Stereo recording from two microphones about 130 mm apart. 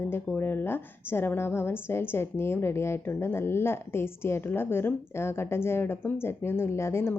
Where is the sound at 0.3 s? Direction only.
15° left (ahead or behind).